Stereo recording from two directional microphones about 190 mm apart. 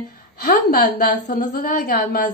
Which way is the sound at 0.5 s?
50° left (ahead or behind).